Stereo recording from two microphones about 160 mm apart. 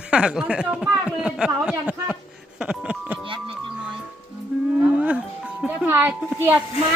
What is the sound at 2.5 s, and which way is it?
Doorbell, 5° right (ahead or behind).